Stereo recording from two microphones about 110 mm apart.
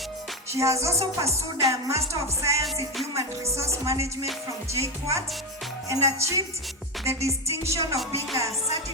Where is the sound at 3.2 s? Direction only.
25° right (ahead or behind).